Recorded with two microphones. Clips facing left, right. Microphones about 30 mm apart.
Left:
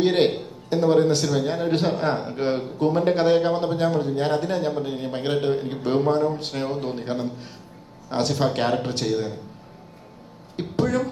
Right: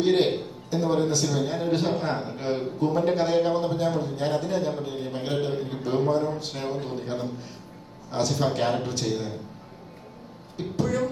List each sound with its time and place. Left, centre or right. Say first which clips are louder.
0.0 s a man's voice: left 2 dB; left
10.6 s a man's voice: left 3 dB; left